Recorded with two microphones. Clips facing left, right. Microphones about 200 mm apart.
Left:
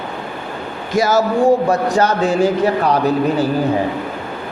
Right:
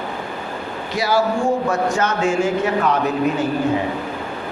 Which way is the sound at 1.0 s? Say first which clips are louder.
Left 5 dB; 45° left (ahead or behind).